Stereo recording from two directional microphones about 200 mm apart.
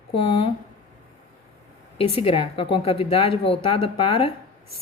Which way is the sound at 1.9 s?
30° left (ahead or behind).